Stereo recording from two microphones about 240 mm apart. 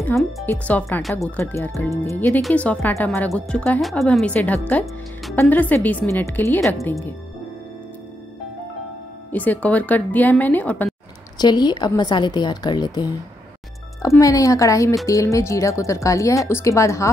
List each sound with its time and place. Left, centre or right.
0.0 s speech: centre
9.3 s speech: centre
11.3 s speech: centre